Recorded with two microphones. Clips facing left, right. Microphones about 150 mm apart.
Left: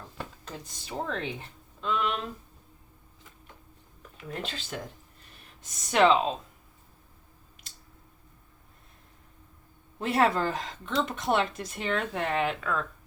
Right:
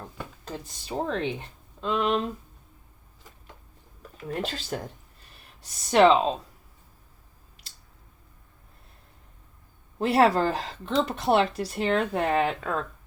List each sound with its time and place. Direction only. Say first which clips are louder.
0.4 s speech: right 5 dB; 35° right (ahead or behind)
4.4 s speech: right 5 dB; 40° right (ahead or behind)
10.0 s speech: right 4 dB; 35° right (ahead or behind)